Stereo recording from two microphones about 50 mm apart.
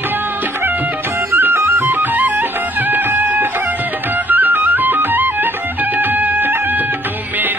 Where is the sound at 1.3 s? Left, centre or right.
Right.